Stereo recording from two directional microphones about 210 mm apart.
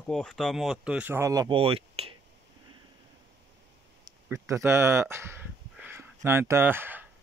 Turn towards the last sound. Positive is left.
turn(degrees=-10)  # may be behind; listen again after turning